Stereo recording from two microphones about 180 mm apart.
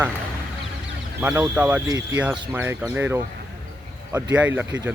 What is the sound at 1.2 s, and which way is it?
Speech, 10° right (ahead or behind).